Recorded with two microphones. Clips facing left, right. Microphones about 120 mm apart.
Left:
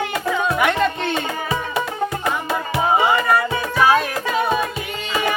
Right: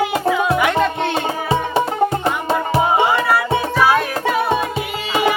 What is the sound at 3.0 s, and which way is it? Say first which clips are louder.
Music: right 1 dB; 10° right (ahead or behind).